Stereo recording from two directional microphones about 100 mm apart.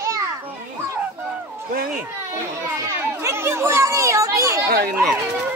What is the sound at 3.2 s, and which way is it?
Speech, 25° right (ahead or behind).